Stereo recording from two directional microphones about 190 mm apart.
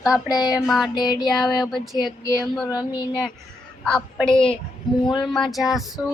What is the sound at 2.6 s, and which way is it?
Female singing, 20° left (ahead or behind).